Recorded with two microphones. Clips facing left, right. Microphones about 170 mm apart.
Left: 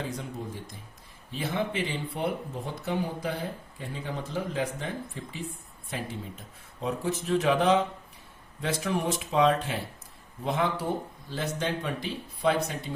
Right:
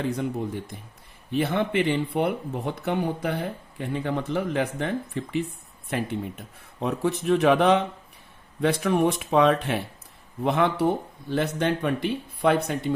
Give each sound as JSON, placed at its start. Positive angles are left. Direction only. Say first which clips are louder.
{"t": 0.1, "sound": "speech", "louder": "right 8 dB", "side_deg": -65}